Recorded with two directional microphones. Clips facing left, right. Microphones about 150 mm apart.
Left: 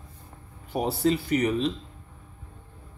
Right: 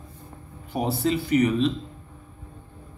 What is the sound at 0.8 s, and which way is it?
Speech, 40° left (ahead or behind).